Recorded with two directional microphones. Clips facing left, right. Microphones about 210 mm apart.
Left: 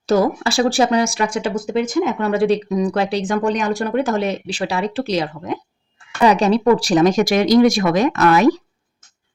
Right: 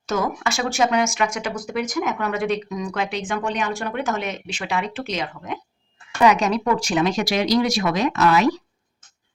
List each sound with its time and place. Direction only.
0.1 s speech: 35° left (ahead or behind); by 8.4 s 50° left (ahead or behind)